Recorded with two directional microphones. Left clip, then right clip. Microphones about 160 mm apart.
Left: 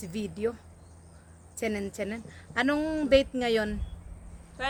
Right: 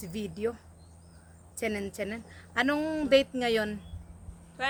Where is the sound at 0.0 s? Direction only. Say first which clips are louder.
Left 1 dB; 10° left (ahead or behind).